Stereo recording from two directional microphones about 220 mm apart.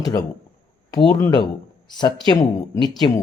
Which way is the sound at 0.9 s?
15° left (ahead or behind).